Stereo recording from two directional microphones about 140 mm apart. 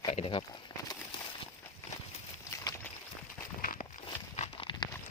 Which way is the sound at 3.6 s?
90° left.